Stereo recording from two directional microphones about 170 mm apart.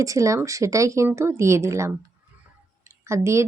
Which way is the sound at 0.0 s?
20° right (ahead or behind).